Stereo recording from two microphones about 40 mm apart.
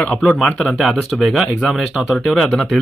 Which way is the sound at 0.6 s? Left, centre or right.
Centre.